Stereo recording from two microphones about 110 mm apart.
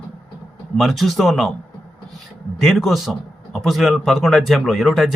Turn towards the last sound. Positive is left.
turn(degrees=0)  # may be behind; listen again after turning